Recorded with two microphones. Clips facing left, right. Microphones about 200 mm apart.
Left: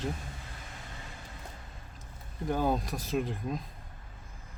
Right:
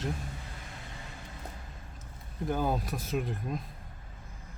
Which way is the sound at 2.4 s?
Centre (ahead or behind).